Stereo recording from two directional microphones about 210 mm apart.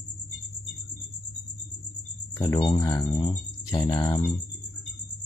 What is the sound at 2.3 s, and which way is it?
Speech, 20° left (ahead or behind).